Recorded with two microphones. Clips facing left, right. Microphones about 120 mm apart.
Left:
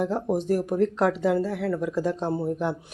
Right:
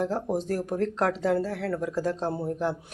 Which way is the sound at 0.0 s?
10° left (ahead or behind).